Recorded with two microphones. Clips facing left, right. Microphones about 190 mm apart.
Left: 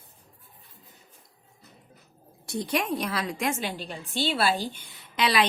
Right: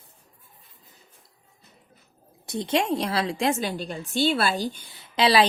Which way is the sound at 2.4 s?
25° right (ahead or behind).